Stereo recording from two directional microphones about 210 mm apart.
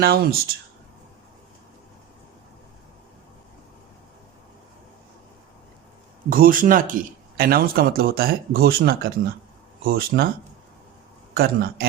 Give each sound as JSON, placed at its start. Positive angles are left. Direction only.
{"t": 0.0, "sound": "speech", "side_deg": -45}
{"t": 6.3, "sound": "speech", "side_deg": -40}
{"t": 11.3, "sound": "speech", "side_deg": -45}